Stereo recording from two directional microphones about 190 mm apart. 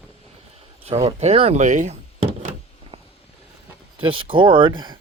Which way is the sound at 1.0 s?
30° right (ahead or behind).